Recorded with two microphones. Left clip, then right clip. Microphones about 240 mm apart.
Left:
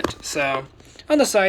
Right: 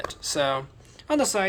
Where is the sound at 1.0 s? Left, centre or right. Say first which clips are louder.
Left 6 dB; centre.